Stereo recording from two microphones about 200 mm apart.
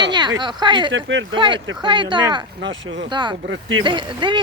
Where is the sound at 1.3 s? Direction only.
25° right (ahead or behind).